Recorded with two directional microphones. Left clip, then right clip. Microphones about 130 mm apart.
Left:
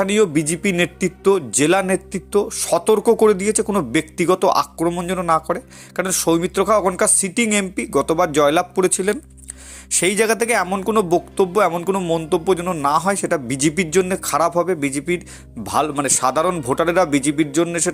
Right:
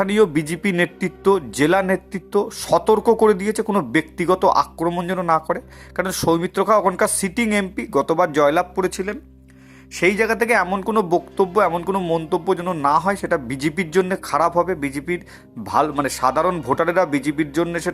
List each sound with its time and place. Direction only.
0.0 s a man's voice: 5° left (ahead or behind)
9.1 s speech: 45° left (ahead or behind); by 10.7 s 25° left (ahead or behind)
10.7 s a man's voice: 15° left (ahead or behind)